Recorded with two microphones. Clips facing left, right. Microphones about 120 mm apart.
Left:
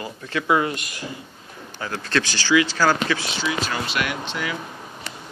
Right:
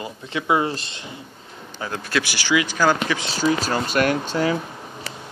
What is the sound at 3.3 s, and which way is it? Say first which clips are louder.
Speech: right 5 dB; 40° right (ahead or behind).